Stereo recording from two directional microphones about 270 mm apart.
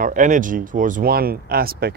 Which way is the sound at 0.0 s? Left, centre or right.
Right.